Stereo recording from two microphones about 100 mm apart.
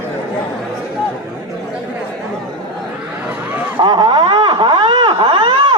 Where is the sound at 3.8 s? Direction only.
50° right (ahead or behind).